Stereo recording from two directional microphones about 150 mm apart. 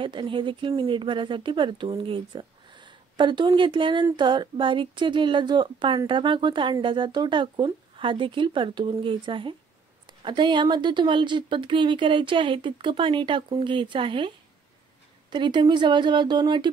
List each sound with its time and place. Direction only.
0.0 s speech: 35° right (ahead or behind)